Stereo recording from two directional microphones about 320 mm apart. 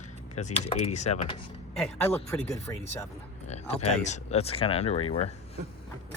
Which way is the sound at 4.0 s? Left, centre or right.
Left.